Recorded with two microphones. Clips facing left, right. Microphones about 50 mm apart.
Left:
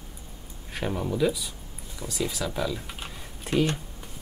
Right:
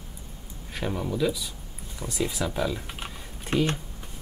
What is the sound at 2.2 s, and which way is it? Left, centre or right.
Speech, centre.